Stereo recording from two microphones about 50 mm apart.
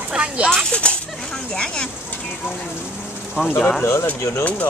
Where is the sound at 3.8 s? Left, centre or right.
Left.